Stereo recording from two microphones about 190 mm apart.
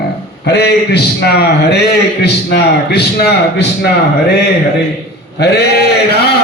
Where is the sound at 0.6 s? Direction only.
55° left (ahead or behind).